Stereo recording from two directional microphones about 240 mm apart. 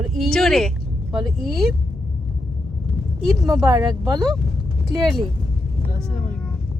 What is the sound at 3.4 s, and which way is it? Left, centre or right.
Speech, centre.